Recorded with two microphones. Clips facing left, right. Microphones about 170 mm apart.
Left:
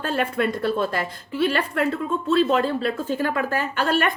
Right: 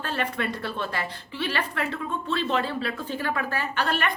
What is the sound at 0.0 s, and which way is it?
A woman's voice, 40° left (ahead or behind).